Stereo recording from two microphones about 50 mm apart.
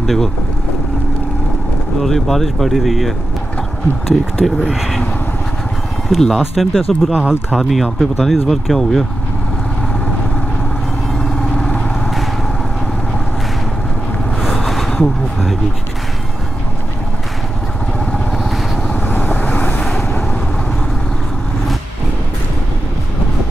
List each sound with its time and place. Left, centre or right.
0.0 s speech: centre
2.0 s speech: centre
4.7 s speech: centre
6.0 s speech: centre
7.1 s speech: right
7.5 s speech: centre
11.2 s vehicle: centre
14.5 s a sound: centre
18.3 s vehicle: centre
18.9 s vehicle: left
19.8 s vehicle: centre